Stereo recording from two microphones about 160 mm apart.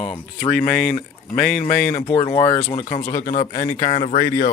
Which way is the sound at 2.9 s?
55° left (ahead or behind).